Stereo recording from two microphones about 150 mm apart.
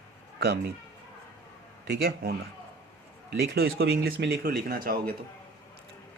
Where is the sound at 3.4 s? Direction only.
90° right.